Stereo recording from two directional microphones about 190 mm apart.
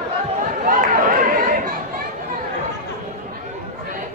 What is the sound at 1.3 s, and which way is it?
Chatter, 45° right (ahead or behind).